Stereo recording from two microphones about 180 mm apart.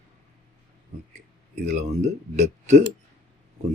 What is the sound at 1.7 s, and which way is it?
Speech, 40° right (ahead or behind).